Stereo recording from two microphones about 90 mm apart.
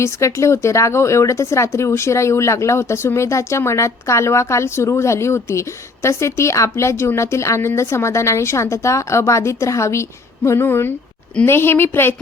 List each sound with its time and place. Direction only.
0.0 s a woman's voice: 35° left (ahead or behind)